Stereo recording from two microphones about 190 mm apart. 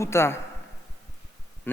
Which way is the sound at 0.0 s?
15° left (ahead or behind).